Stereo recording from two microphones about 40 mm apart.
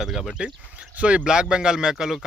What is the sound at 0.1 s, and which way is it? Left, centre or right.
Speech, centre.